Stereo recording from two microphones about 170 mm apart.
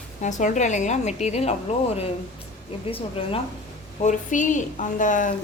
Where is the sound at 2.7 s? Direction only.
35° left (ahead or behind).